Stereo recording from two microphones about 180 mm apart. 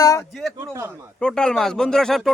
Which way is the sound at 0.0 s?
20° left (ahead or behind).